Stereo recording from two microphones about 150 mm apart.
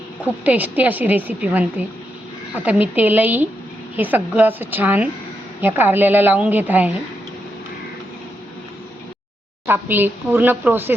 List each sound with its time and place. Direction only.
0.3 s speech: 10° right (ahead or behind)
2.6 s speech: 10° right (ahead or behind)
9.6 s speech: 15° right (ahead or behind)